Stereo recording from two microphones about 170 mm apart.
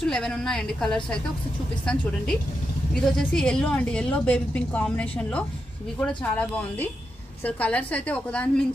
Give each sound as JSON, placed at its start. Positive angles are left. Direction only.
{"t": 0.0, "sound": "a woman's voice", "side_deg": 5}